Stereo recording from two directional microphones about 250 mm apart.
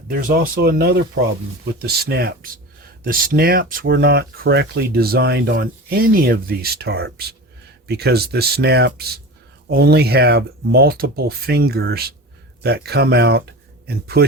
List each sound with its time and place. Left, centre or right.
0.1 s speech: right